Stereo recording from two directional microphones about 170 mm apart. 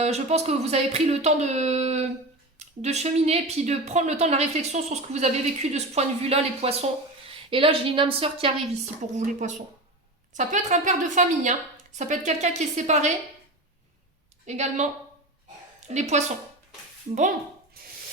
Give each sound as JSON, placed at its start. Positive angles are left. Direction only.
{"t": 0.0, "sound": "speech", "side_deg": -40}
{"t": 9.1, "sound": "a woman's voice", "side_deg": -45}
{"t": 14.4, "sound": "a woman's voice", "side_deg": -40}
{"t": 15.9, "sound": "a woman's voice", "side_deg": -40}